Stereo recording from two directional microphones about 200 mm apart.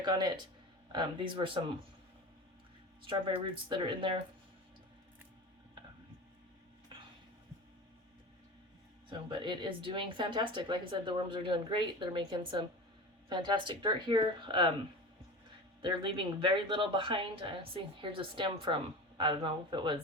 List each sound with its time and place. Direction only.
0.0 s speech: 20° right (ahead or behind)
3.1 s speech: 25° right (ahead or behind)
6.9 s a sound: 25° right (ahead or behind)
9.0 s speech: 25° right (ahead or behind)
15.8 s speech: 25° right (ahead or behind)